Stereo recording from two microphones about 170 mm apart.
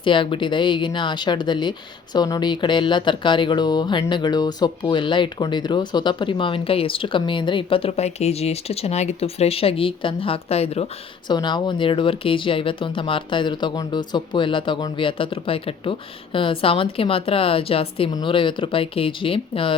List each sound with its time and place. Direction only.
0.0 s speech: 30° left (ahead or behind)
11.3 s speech: 25° left (ahead or behind)